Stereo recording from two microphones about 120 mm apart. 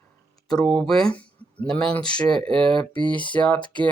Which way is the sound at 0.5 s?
5° left (ahead or behind).